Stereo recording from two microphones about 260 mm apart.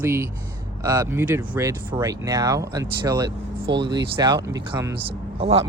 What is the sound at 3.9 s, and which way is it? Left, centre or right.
Speech, centre.